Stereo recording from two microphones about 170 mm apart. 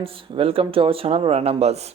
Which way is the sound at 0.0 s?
30° right (ahead or behind).